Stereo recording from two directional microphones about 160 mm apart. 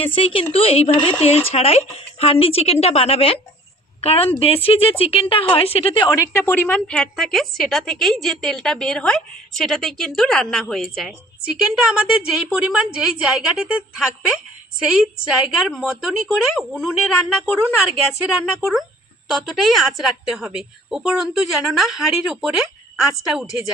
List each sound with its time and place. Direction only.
0.0 s speech: 35° left (ahead or behind)
6.1 s a woman's voice: 15° left (ahead or behind); by 16.9 s 5° right (ahead or behind)
18.4 s a woman's voice: centre (ahead or behind)